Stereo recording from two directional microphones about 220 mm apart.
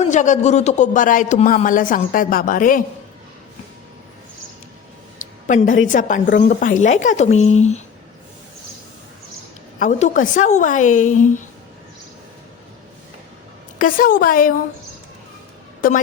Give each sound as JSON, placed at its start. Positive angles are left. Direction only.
{"t": 0.0, "sound": "speech", "side_deg": 35}
{"t": 5.5, "sound": "speech", "side_deg": 35}
{"t": 9.7, "sound": "speech", "side_deg": 35}
{"t": 13.7, "sound": "speech", "side_deg": 40}
{"t": 15.8, "sound": "speech", "side_deg": 40}